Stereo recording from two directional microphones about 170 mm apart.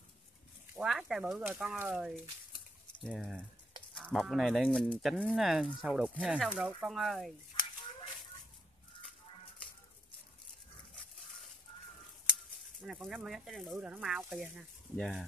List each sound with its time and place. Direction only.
0.7 s speech: centre (ahead or behind)
9.0 s a sound: 30° left (ahead or behind)
12.8 s speech: 5° right (ahead or behind)